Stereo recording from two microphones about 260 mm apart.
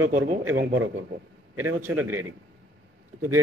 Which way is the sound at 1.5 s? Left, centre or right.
Centre.